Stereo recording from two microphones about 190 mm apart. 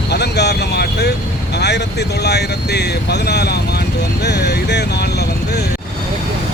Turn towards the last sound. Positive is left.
turn(degrees=60)  # may be behind; listen again after turning